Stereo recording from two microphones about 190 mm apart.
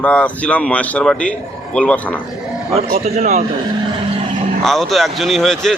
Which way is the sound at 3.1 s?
40° right (ahead or behind).